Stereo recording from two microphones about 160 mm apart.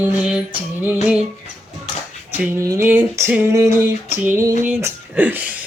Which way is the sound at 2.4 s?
15° right (ahead or behind).